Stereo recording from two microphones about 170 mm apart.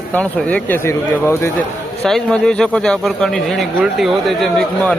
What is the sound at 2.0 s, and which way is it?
Speech, 5° left (ahead or behind).